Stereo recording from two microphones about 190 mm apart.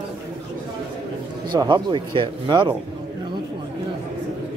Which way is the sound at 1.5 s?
20° right (ahead or behind).